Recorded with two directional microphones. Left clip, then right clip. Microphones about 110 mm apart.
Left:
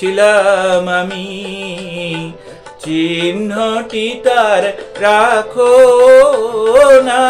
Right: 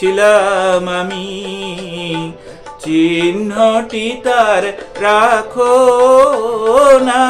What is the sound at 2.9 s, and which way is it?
Mantra, 20° right (ahead or behind).